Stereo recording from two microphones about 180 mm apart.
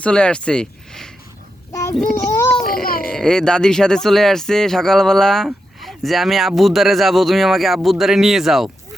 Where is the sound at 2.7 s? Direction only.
55° left (ahead or behind).